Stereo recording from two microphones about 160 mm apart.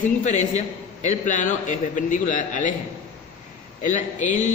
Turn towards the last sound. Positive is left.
turn(degrees=50)  # may be behind; listen again after turning